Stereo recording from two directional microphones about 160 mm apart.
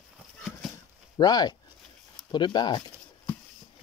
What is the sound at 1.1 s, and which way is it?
Speech, 25° left (ahead or behind).